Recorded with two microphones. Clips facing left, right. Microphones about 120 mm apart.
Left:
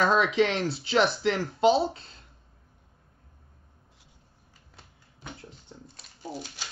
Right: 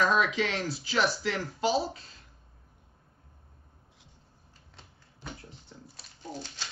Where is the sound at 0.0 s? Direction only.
25° left (ahead or behind).